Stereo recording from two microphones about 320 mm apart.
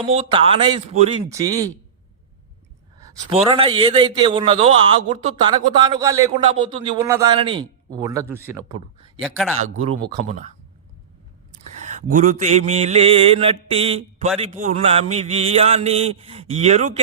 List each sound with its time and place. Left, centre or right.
0.0 s a man's voice: centre
3.0 s a man's voice: centre
10.0 s a man's voice: centre
12.1 s mantra: right